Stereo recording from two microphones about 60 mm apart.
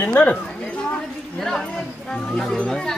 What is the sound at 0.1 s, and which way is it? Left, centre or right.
Speech, left.